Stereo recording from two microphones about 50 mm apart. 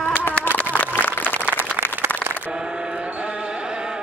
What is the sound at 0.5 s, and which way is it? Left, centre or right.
Applause, left.